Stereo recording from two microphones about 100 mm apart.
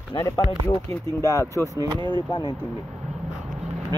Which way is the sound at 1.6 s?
35° right (ahead or behind).